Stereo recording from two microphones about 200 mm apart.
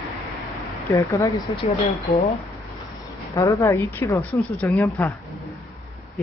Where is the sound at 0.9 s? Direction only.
15° left (ahead or behind).